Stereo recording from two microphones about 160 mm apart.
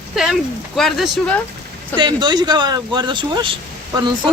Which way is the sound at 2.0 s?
30° right (ahead or behind).